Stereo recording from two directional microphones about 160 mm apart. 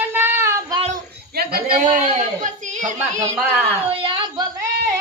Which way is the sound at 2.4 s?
55° right (ahead or behind).